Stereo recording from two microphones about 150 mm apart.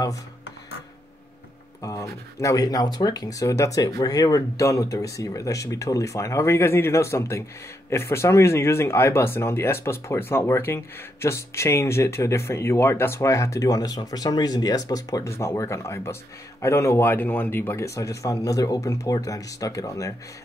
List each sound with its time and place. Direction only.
1.8 s speech: 20° left (ahead or behind)